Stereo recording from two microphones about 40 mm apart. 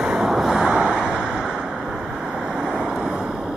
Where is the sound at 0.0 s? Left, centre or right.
Centre.